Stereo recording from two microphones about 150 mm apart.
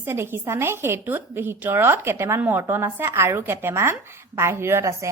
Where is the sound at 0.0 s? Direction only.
15° right (ahead or behind).